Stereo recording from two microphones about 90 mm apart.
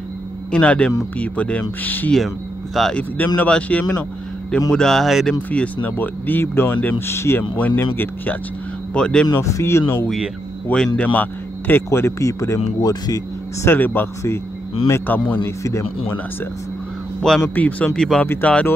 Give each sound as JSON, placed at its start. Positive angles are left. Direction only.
{"t": 0.5, "sound": "speech", "side_deg": 10}
{"t": 2.1, "sound": "speech", "side_deg": 0}
{"t": 2.9, "sound": "speech", "side_deg": 15}
{"t": 5.5, "sound": "speech", "side_deg": 15}
{"t": 8.9, "sound": "speech", "side_deg": 10}
{"t": 9.3, "sound": "speech", "side_deg": 35}
{"t": 10.7, "sound": "speech", "side_deg": 20}
{"t": 13.7, "sound": "speech", "side_deg": 20}
{"t": 15.4, "sound": "speech", "side_deg": 35}
{"t": 17.3, "sound": "speech", "side_deg": 5}
{"t": 17.6, "sound": "speech", "side_deg": 15}